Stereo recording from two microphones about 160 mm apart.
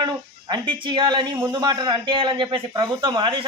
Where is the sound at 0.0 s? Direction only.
30° right (ahead or behind).